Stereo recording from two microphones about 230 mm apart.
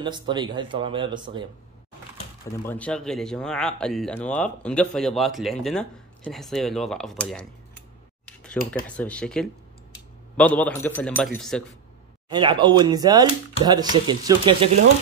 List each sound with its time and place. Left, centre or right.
0.0 s speech: centre
2.6 s speech: centre
8.8 s a man's voice: centre
12.3 s speech: centre